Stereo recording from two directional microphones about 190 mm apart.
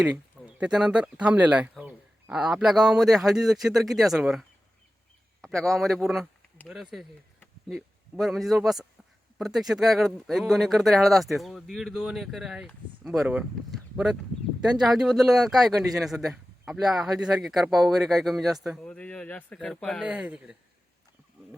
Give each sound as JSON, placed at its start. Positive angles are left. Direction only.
{"t": 0.0, "sound": "a man's voice", "side_deg": -5}